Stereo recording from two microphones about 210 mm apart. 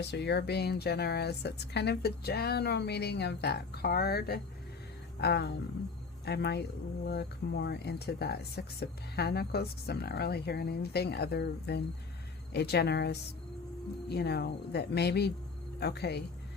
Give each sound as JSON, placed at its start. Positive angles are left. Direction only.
{"t": 0.0, "sound": "speech", "side_deg": 55}